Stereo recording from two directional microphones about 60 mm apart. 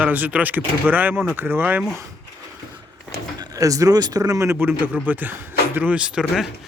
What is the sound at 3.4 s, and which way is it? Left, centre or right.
Speech, right.